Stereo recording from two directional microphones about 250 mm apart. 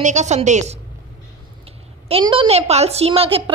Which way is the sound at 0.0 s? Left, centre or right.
Right.